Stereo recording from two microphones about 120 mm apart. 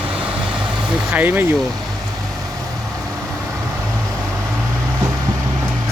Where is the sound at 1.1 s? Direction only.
15° right (ahead or behind).